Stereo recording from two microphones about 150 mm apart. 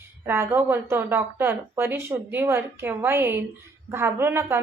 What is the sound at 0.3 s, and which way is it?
A woman's voice, 15° right (ahead or behind).